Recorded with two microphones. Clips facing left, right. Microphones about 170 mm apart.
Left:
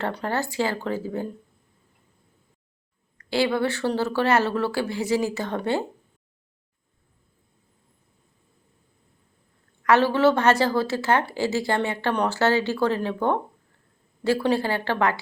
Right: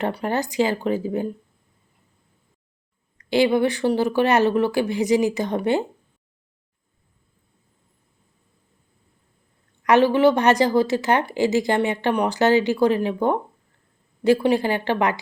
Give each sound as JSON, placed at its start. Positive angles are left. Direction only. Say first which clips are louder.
{"t": 0.0, "sound": "a woman's voice", "louder": "right 3 dB", "side_deg": -15}
{"t": 3.2, "sound": "a woman's voice", "louder": "right 5 dB", "side_deg": -20}
{"t": 9.8, "sound": "a woman's voice", "louder": "right 3 dB", "side_deg": -15}